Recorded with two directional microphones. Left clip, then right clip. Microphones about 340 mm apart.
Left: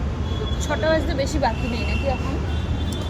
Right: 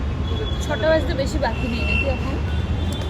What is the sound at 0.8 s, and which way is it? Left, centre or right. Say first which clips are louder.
Speech: right 2 dB; centre.